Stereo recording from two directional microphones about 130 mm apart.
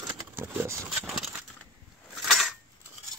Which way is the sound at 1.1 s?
Centre (ahead or behind).